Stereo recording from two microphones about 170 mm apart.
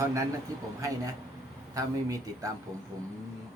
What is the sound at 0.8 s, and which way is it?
Speech, 20° right (ahead or behind).